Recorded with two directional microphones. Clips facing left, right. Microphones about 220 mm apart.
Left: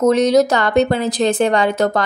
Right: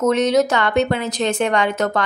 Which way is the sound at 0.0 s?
35° left (ahead or behind).